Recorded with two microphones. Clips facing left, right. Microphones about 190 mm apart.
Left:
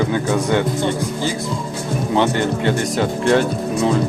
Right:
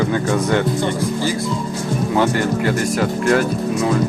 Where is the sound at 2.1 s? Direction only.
25° left (ahead or behind).